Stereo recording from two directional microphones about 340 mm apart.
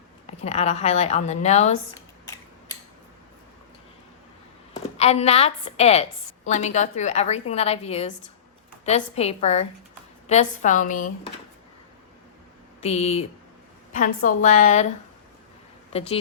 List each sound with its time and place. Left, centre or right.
0.3 s a woman's voice: centre
4.7 s a woman's voice: centre
12.8 s a woman's voice: centre
14.3 s a woman's voice: left
15.9 s speech: centre